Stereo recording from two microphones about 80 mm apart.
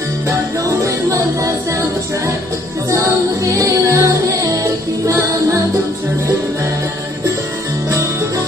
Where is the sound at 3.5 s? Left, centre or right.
Right.